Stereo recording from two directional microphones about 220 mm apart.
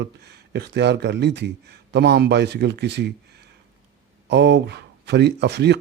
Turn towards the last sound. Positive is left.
turn(degrees=-50)  # may be behind; listen again after turning